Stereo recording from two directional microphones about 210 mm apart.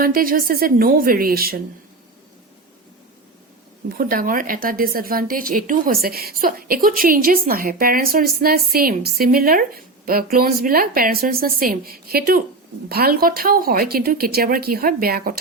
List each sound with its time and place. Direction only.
0.0 s speech: 45° right (ahead or behind)
3.8 s speech: 45° right (ahead or behind)